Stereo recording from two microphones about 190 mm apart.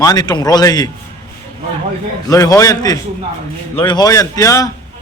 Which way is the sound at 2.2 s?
20° left (ahead or behind).